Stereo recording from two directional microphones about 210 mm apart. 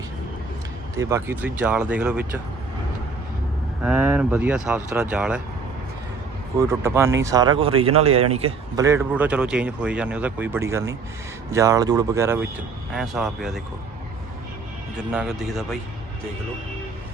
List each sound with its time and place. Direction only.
0.9 s speech: 10° right (ahead or behind)
3.8 s speech: 5° right (ahead or behind)
6.6 s speech: 15° right (ahead or behind); by 8.5 s 30° right (ahead or behind)
8.7 s speech: 15° right (ahead or behind)
12.9 s speech: centre (ahead or behind)
14.9 s speech: 5° right (ahead or behind)